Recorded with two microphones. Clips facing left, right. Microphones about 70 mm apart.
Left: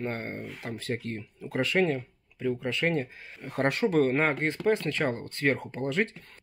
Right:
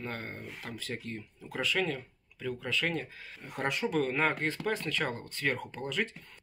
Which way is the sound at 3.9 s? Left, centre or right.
Left.